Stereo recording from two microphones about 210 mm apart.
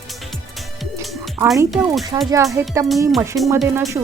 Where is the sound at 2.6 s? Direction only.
10° right (ahead or behind).